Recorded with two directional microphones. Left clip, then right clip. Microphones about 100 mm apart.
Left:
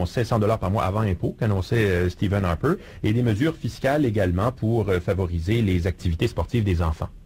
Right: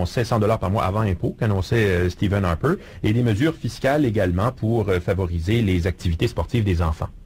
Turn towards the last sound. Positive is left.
turn(degrees=25)  # may be behind; listen again after turning